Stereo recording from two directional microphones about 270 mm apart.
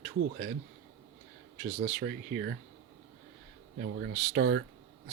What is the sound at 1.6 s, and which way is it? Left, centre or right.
Speech, right.